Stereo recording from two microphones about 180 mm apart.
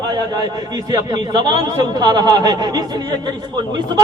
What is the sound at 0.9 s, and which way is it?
Speech, 25° right (ahead or behind).